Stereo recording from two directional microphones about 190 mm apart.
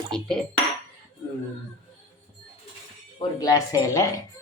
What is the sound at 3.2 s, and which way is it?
Speech, 20° left (ahead or behind).